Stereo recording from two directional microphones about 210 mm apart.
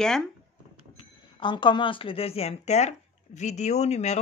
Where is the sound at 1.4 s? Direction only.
20° left (ahead or behind).